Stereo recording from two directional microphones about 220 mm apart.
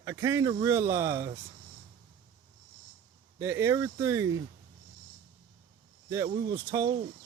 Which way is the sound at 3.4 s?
10° right (ahead or behind).